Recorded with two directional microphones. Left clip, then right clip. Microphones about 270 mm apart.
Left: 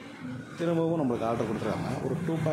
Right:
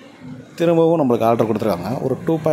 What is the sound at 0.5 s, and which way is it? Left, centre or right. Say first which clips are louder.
Speech: right 13 dB; right.